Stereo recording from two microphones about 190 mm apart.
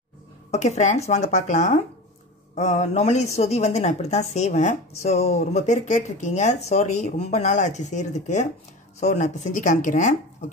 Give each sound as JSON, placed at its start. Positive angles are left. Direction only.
{"t": 0.5, "sound": "speech", "side_deg": 35}